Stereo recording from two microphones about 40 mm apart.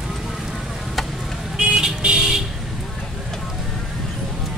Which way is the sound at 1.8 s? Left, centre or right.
Centre.